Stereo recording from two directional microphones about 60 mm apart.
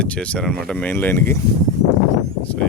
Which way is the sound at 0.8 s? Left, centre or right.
Left.